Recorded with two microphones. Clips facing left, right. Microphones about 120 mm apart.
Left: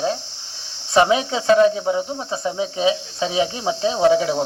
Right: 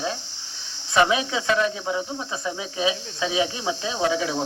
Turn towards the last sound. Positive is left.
turn(degrees=30)  # may be behind; listen again after turning